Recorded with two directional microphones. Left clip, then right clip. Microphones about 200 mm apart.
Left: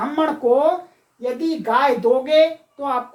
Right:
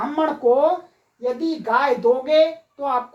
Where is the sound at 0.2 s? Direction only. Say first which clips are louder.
Even; 10° right (ahead or behind).